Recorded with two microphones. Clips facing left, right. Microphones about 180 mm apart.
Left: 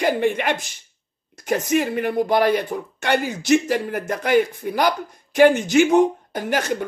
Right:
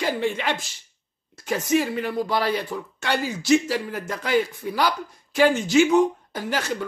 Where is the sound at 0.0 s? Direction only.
55° left (ahead or behind).